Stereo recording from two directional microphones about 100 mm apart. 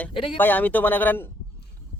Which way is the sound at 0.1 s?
60° left (ahead or behind).